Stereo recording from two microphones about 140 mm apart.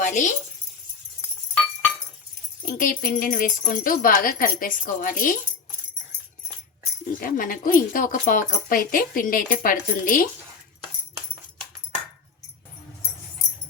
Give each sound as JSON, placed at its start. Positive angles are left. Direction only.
{"t": 0.0, "sound": "speech", "side_deg": 65}
{"t": 2.6, "sound": "speech", "side_deg": 85}
{"t": 7.2, "sound": "speech", "side_deg": 85}